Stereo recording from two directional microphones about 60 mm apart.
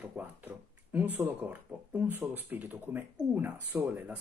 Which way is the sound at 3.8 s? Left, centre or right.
Right.